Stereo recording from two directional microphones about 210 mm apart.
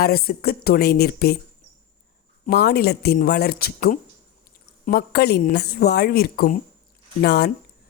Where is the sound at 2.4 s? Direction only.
45° left (ahead or behind).